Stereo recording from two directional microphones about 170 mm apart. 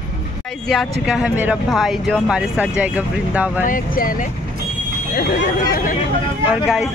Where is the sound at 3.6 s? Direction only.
55° left (ahead or behind).